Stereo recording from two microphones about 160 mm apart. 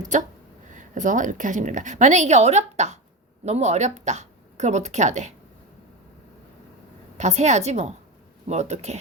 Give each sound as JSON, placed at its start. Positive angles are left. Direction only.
{"t": 0.7, "sound": "a woman's voice", "side_deg": -55}
{"t": 7.2, "sound": "a woman's voice", "side_deg": -45}